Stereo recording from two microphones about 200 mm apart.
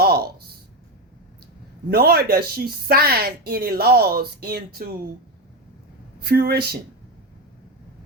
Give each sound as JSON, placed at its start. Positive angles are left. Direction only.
{"t": 0.0, "sound": "a sound", "side_deg": -50}
{"t": 1.9, "sound": "speech", "side_deg": -50}
{"t": 6.1, "sound": "speech", "side_deg": -50}